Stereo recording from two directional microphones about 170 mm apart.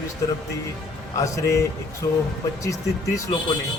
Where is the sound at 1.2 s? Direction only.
20° left (ahead or behind).